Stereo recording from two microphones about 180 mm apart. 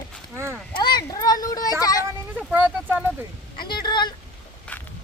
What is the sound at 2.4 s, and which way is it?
Speech, 5° right (ahead or behind).